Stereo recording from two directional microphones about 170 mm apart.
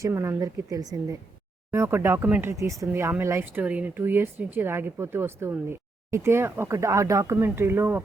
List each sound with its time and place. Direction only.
0.0 s speech: 15° right (ahead or behind)